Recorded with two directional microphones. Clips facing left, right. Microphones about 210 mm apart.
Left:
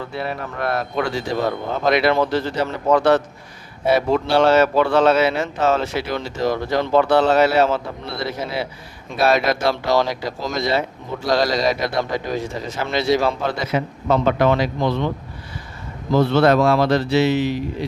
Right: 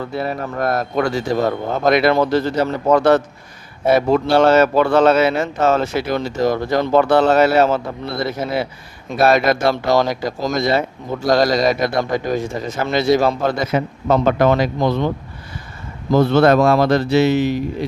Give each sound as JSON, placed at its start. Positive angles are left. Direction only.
{"t": 0.1, "sound": "speech", "side_deg": -40}
{"t": 16.1, "sound": "speech", "side_deg": -45}